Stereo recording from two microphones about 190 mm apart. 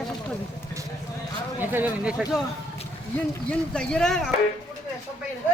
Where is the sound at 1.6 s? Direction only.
10° right (ahead or behind).